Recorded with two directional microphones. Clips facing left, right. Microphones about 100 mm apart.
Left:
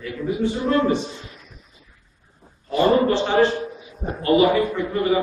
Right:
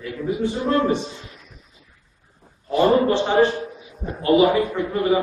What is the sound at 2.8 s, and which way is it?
Speech, 20° right (ahead or behind).